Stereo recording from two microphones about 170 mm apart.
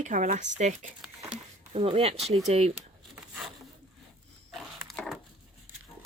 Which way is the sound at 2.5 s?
40° right (ahead or behind).